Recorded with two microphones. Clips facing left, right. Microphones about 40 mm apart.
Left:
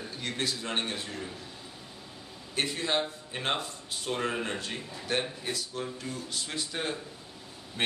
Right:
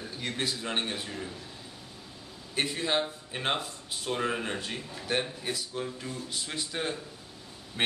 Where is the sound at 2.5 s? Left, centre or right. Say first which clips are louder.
Right 1 dB; centre.